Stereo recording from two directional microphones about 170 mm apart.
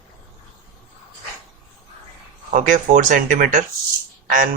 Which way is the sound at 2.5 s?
50° right (ahead or behind).